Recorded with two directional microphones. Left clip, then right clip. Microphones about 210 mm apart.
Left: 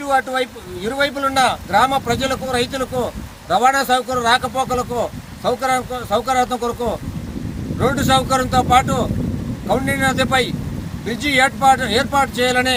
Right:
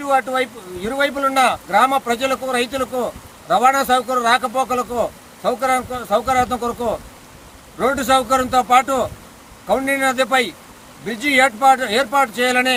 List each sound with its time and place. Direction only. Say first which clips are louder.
0.0 s speech: even; 5° left (ahead or behind)